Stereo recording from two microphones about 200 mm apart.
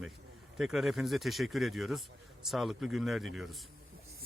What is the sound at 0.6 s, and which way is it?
Speech, centre (ahead or behind).